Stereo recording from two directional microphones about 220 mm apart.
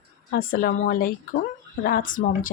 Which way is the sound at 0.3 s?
40° left (ahead or behind).